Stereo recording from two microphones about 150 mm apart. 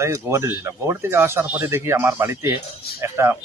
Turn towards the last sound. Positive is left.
turn(degrees=-20)  # may be behind; listen again after turning